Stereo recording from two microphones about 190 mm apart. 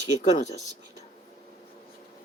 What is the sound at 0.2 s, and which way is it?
Speech, 40° left (ahead or behind).